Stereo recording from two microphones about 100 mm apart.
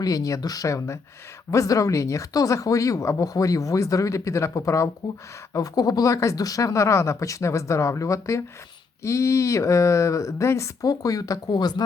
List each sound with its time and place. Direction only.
0.0 s speech: 35° left (ahead or behind)